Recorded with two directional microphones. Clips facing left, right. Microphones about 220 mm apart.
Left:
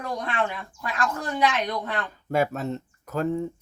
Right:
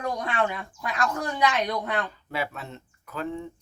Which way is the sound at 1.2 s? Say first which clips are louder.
Left 1 dB; 15° right (ahead or behind).